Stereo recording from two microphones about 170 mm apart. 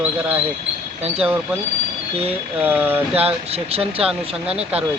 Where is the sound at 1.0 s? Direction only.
35° right (ahead or behind).